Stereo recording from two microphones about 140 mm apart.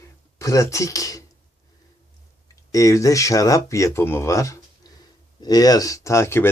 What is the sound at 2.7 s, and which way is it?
A man's voice, 25° left (ahead or behind).